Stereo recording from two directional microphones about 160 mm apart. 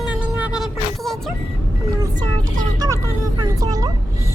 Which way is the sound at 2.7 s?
25° right (ahead or behind).